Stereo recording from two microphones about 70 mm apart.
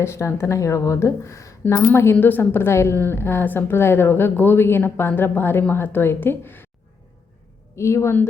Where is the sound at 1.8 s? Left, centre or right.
Left.